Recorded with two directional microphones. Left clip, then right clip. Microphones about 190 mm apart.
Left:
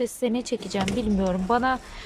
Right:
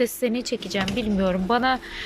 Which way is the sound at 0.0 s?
10° left (ahead or behind).